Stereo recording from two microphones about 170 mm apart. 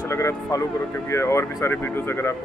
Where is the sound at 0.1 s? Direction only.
15° left (ahead or behind).